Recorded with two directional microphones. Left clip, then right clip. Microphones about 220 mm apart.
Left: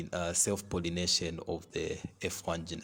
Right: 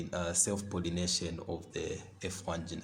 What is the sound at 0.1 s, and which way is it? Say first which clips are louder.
Speech: left 2 dB; 35° left (ahead or behind).